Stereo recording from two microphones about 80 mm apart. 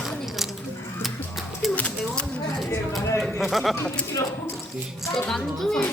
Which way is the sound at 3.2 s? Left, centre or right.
Centre.